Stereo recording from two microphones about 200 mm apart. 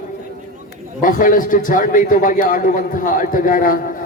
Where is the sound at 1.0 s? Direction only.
40° left (ahead or behind).